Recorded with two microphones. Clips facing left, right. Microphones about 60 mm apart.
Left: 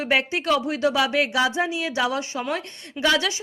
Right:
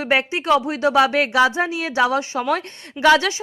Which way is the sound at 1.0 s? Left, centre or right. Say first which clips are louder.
Right 9 dB; right.